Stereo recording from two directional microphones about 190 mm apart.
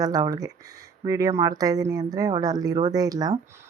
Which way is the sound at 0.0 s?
20° right (ahead or behind).